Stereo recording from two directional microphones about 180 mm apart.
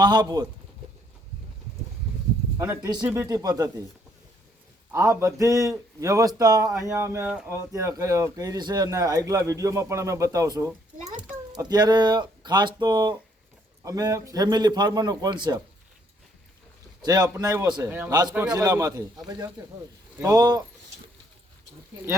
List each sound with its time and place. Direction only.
0.0 s a man's voice: 25° right (ahead or behind)
2.6 s a man's voice: 15° right (ahead or behind)
4.9 s speech: 15° right (ahead or behind)
10.9 s a sound: 40° right (ahead or behind)
11.7 s a man's voice: 25° right (ahead or behind)
17.0 s a man's voice: 20° right (ahead or behind)